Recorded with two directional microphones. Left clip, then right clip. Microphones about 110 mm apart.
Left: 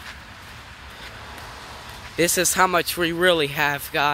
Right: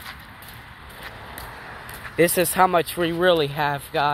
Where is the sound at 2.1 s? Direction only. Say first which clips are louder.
Right 1 dB; 15° left (ahead or behind).